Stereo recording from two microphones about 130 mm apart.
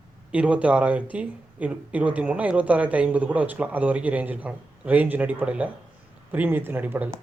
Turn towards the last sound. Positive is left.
turn(degrees=-15)  # may be behind; listen again after turning